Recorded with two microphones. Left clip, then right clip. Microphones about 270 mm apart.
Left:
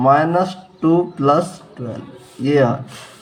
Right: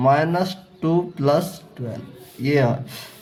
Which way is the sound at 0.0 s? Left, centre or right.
Right.